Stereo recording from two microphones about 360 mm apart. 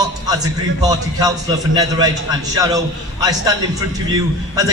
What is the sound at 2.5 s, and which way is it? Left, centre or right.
A man's voice, centre.